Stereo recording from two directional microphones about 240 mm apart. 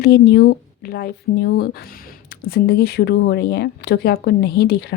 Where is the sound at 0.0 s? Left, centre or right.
Left.